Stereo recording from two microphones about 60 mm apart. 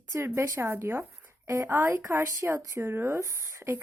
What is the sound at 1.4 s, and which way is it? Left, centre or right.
Speech, right.